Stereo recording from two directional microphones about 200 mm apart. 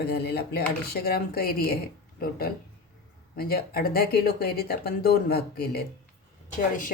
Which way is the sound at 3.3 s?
50° left (ahead or behind).